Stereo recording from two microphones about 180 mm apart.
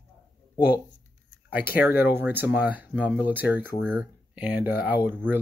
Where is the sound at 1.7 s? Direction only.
10° right (ahead or behind).